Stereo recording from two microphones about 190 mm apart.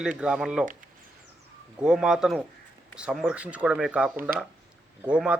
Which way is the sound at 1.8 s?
5° right (ahead or behind).